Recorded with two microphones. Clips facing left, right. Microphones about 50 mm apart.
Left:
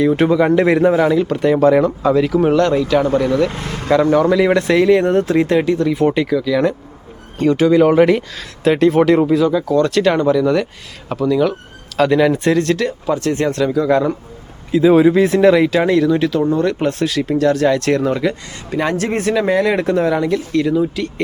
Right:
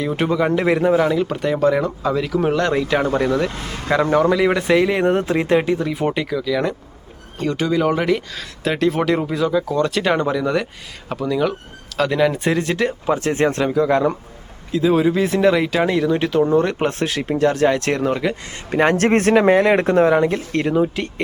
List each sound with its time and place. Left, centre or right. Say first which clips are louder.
0.0 s speech: left 6 dB; centre
2.6 s speech: left 4 dB; centre
12.4 s speech: left 4 dB; centre
13.8 s speech: left 2 dB; centre
14.7 s speech: left 6 dB; centre
16.0 s speech: left 2 dB; right
18.7 s speech: right 3 dB; right
20.5 s speech: left 2 dB; right